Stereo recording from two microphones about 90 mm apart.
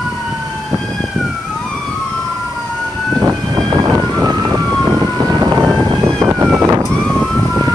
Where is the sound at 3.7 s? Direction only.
45° right (ahead or behind).